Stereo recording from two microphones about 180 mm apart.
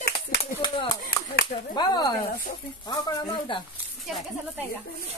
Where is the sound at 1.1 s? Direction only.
55° left (ahead or behind).